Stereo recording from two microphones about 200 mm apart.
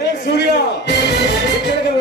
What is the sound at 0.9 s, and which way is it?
Music, 60° left (ahead or behind).